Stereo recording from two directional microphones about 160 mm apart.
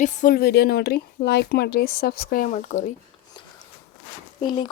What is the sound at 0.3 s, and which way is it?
Speech, 80° left.